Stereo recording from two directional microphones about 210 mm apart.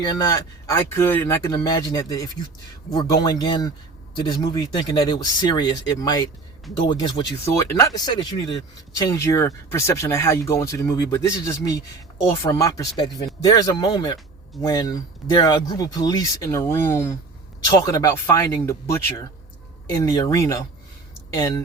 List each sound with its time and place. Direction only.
0.0 s speech: 20° left (ahead or behind)